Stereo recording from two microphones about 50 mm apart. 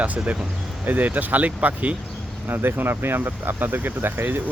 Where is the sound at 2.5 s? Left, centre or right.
Right.